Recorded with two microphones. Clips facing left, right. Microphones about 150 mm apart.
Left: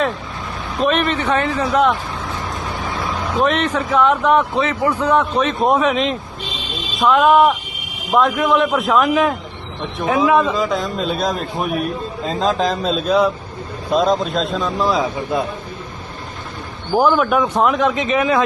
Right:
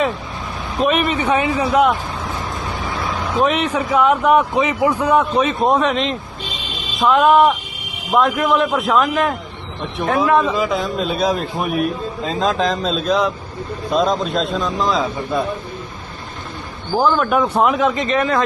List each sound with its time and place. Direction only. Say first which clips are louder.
0.8 s a man's voice: even; 10° right (ahead or behind)
3.3 s a man's voice: even; 10° right (ahead or behind); by 15.0 s 5° left (ahead or behind)
16.9 s a man's voice: left 1 dB; 10° left (ahead or behind)